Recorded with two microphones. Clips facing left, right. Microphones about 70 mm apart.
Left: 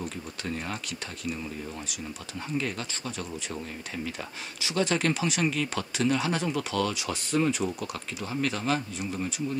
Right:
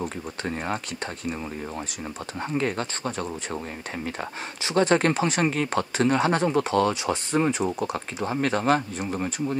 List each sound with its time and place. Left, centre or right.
0.0 s speech: right
2.5 s speech: right